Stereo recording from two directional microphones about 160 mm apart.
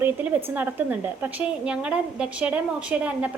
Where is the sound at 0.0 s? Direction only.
10° right (ahead or behind).